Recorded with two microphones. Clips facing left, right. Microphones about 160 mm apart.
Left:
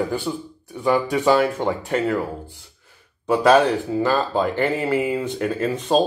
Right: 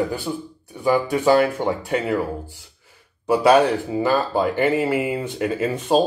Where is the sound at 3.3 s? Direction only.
5° right (ahead or behind).